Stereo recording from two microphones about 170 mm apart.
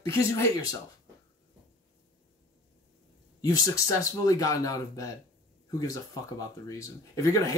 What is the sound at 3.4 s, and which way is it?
Speech, 20° left (ahead or behind).